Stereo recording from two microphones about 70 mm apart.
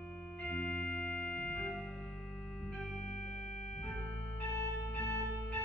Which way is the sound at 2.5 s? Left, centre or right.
Centre.